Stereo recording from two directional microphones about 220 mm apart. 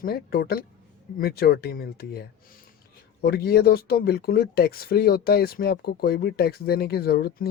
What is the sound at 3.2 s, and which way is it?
Speech, 45° left (ahead or behind).